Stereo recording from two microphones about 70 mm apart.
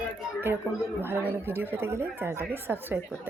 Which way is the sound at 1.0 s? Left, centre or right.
Right.